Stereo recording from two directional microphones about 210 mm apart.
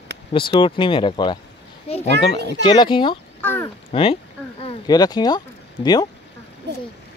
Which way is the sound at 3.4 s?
10° left (ahead or behind).